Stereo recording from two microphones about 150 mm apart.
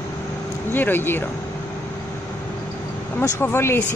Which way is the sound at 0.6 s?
15° left (ahead or behind).